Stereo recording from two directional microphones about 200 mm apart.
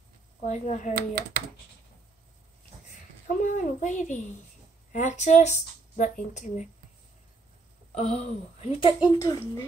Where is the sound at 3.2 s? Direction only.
40° left (ahead or behind).